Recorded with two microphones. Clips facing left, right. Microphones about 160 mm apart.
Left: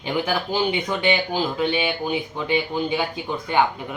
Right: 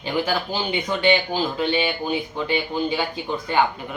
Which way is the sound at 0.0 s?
15° left (ahead or behind).